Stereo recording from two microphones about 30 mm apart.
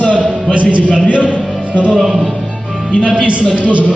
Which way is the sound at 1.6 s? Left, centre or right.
Right.